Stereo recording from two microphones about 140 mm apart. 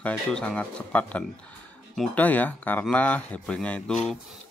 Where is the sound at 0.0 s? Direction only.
10° left (ahead or behind).